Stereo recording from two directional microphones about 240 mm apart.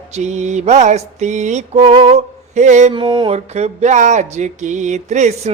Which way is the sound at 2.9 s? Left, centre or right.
Centre.